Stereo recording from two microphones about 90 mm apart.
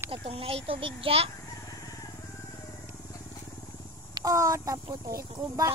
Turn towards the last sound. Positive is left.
turn(degrees=-40)  # may be behind; listen again after turning